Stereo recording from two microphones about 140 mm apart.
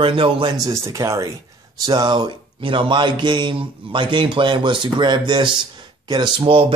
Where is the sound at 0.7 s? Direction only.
20° right (ahead or behind).